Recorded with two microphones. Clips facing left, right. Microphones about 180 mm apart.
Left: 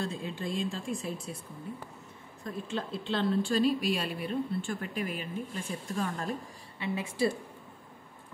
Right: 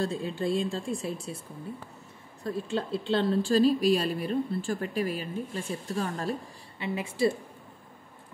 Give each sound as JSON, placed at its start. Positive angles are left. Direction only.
{"t": 0.0, "sound": "a woman's voice", "side_deg": -35}
{"t": 2.4, "sound": "a woman's voice", "side_deg": -30}